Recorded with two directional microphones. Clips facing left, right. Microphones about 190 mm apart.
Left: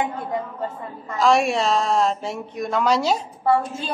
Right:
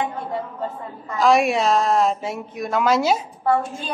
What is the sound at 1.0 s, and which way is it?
A woman's voice, centre (ahead or behind).